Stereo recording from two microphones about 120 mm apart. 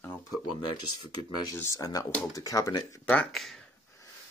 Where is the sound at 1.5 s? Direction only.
25° left (ahead or behind).